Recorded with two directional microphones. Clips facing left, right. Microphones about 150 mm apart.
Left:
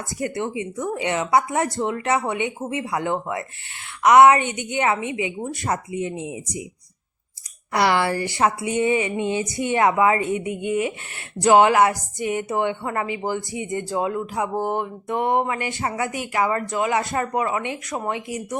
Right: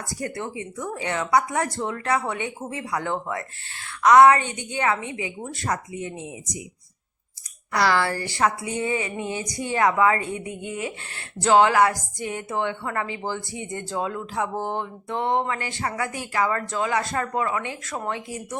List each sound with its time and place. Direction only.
0.1 s speech: 20° left (ahead or behind)
7.7 s speech: 20° left (ahead or behind)